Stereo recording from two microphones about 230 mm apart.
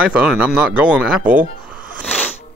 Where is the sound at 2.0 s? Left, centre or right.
Centre.